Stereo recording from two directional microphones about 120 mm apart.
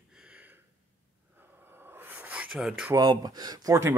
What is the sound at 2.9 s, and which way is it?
Speech, 35° right (ahead or behind).